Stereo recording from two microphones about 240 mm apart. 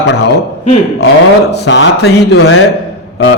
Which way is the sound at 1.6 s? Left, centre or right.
Left.